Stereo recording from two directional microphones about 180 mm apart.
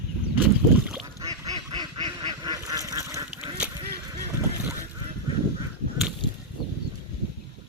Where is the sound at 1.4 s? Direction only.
25° right (ahead or behind).